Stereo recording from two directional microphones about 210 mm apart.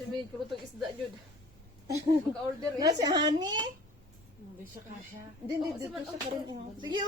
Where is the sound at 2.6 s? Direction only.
15° right (ahead or behind).